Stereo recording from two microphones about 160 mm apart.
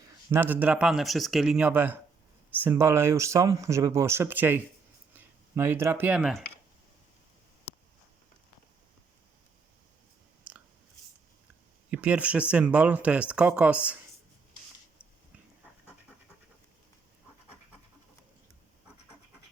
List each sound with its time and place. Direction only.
0.3 s speech: 10° right (ahead or behind)
10.5 s chewing: 10° right (ahead or behind)
11.9 s speech: 10° right (ahead or behind)